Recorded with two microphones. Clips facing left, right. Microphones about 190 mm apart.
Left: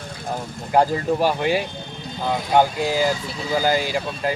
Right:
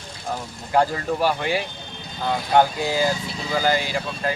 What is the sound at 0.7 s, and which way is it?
Speech, 15° left (ahead or behind).